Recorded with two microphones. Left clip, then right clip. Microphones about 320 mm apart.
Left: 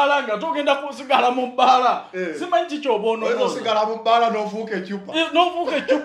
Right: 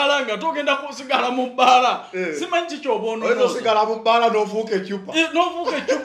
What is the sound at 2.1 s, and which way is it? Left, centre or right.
A man's voice, right.